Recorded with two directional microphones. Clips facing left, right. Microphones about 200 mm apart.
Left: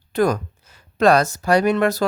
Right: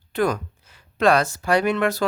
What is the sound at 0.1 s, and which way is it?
Speech, 40° left (ahead or behind).